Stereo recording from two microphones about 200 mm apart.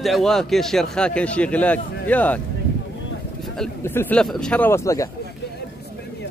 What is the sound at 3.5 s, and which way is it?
Speech, 5° left (ahead or behind).